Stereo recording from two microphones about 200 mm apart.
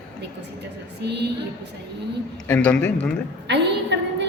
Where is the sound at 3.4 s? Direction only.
60° right (ahead or behind).